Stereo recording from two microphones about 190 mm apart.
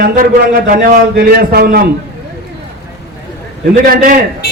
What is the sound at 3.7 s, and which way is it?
Speech, 45° right (ahead or behind).